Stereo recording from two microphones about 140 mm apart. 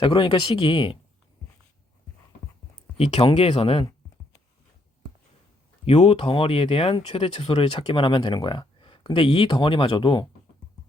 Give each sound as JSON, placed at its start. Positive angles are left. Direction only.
{"t": 0.0, "sound": "speech", "side_deg": 35}
{"t": 3.0, "sound": "speech", "side_deg": 45}
{"t": 5.8, "sound": "speech", "side_deg": 45}